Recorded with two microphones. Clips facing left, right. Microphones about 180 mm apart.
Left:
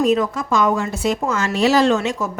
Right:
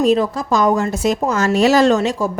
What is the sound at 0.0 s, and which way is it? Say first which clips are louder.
A woman's voice: right 2 dB; 30° right (ahead or behind).